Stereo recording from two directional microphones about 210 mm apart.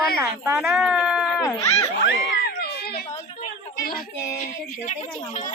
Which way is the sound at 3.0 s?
35° left (ahead or behind).